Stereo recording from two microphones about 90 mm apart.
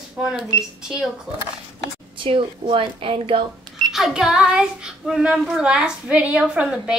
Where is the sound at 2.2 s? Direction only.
75° right (ahead or behind); by 3.4 s 90° right.